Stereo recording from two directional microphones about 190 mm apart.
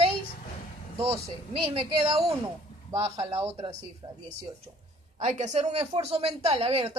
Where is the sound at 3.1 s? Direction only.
15° right (ahead or behind).